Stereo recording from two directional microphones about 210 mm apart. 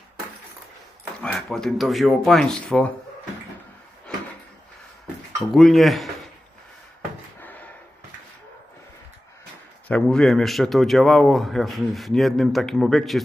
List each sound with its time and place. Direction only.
1.2 s speech: 5° left (ahead or behind)
4.1 s drawer open or close: 5° left (ahead or behind)
5.5 s speech: centre (ahead or behind)
7.3 s a sound: 10° left (ahead or behind)
9.9 s speech: 5° left (ahead or behind)